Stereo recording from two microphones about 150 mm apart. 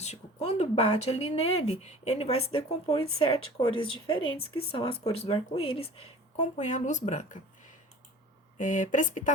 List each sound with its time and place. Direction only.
0.0 s speech: 45° left (ahead or behind)
6.3 s speech: 55° left (ahead or behind)
8.6 s speech: 60° left (ahead or behind)